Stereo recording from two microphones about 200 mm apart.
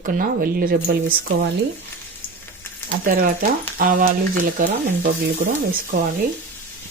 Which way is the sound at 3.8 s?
45° right (ahead or behind).